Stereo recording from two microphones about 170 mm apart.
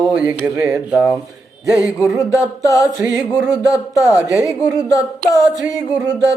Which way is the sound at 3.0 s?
10° right (ahead or behind).